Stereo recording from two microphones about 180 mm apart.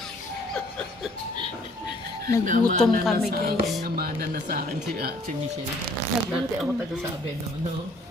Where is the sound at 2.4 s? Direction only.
45° right (ahead or behind).